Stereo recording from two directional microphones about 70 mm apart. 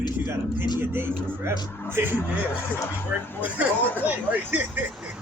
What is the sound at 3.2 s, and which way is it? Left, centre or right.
Speech, left.